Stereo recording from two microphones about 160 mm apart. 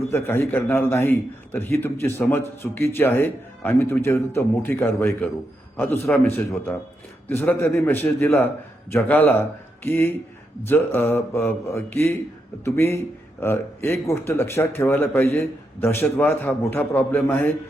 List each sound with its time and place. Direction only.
0.1 s a man's voice: 15° left (ahead or behind)